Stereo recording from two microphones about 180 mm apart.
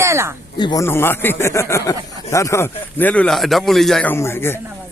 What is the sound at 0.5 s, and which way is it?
A man's voice, 25° left (ahead or behind).